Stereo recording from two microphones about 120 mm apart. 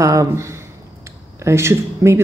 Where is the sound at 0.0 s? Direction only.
30° right (ahead or behind).